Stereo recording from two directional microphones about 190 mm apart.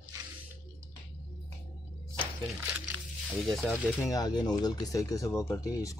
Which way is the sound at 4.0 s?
20° left (ahead or behind).